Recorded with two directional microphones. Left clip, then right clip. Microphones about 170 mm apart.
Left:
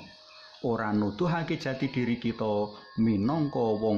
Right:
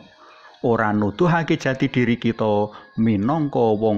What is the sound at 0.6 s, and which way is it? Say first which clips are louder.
A man's voice: right 10 dB; 30° right (ahead or behind).